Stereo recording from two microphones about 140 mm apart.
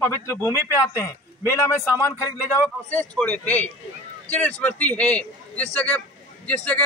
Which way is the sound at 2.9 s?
10° left (ahead or behind).